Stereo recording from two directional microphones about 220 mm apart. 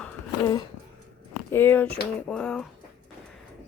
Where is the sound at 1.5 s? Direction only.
10° left (ahead or behind).